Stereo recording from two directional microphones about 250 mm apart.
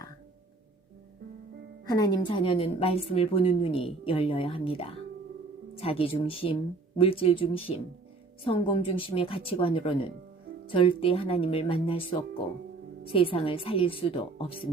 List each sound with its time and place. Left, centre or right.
1.9 s a woman's voice: centre
13.1 s a woman's voice: left